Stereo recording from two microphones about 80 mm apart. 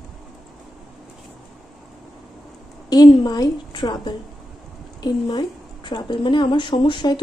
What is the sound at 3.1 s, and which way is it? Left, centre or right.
A woman's voice, left.